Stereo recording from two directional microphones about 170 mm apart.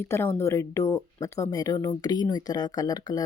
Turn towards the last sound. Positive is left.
turn(degrees=20)  # may be behind; listen again after turning